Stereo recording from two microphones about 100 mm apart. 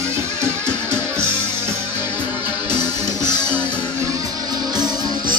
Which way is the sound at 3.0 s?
25° right (ahead or behind).